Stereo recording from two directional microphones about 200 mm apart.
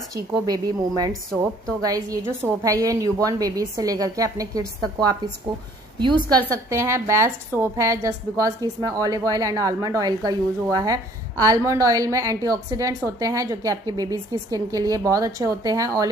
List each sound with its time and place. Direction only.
0.5 s a woman's voice: 20° right (ahead or behind)
6.4 s a woman's voice: 15° right (ahead or behind)